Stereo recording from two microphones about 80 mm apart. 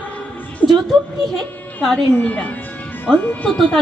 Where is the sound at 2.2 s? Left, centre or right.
Centre.